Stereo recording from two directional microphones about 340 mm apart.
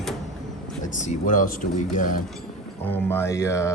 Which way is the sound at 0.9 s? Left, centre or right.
Left.